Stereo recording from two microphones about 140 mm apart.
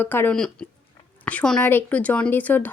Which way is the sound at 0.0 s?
15° left (ahead or behind).